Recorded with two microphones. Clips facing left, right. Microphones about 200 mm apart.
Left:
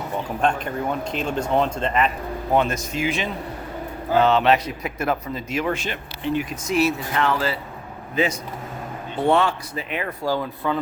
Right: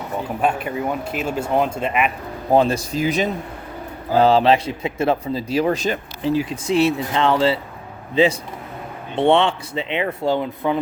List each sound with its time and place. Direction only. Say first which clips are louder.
0.4 s speech: right 2 dB; 5° right (ahead or behind)
2.5 s a man's voice: right 5 dB; 35° right (ahead or behind)